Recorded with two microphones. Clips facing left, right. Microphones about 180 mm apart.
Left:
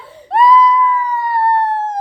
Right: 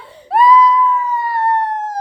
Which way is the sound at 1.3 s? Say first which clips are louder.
Left 4 dB; 30° left (ahead or behind).